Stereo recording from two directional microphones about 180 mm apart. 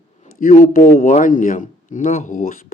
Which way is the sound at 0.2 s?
45° left (ahead or behind).